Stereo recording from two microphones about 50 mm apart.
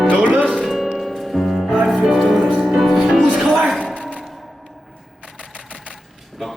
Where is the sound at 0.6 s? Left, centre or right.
Centre.